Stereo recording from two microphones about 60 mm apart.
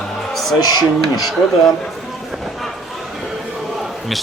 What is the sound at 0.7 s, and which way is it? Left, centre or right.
Speech, left.